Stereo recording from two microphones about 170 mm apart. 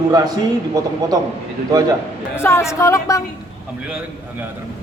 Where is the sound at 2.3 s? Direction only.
15° left (ahead or behind).